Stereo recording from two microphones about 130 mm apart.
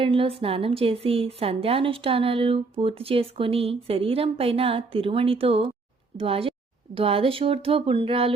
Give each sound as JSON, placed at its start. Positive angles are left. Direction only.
{"t": 0.0, "sound": "a woman's voice", "side_deg": -45}